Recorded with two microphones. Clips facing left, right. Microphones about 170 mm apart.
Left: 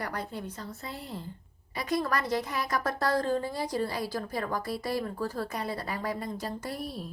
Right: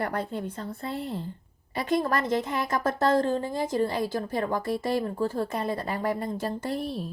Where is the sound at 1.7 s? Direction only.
25° right (ahead or behind).